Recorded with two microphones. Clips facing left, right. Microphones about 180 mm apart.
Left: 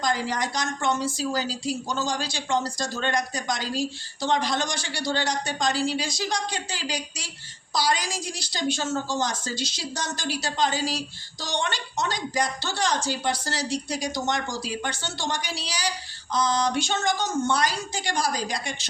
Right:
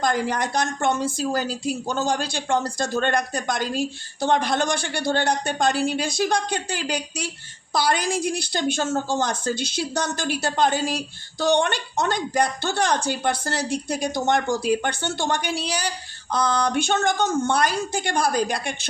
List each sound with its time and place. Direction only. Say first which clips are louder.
0.0 s a woman's voice: right 3 dB; 55° right (ahead or behind)